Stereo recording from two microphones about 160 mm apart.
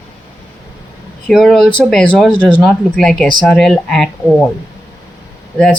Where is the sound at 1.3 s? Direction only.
Centre (ahead or behind).